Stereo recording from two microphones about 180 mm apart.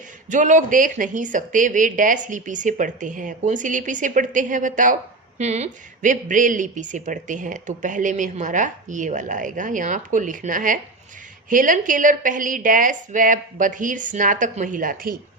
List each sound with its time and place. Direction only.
0.3 s speech: 45° right (ahead or behind)